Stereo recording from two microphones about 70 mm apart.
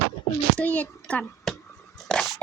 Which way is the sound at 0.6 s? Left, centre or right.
Left.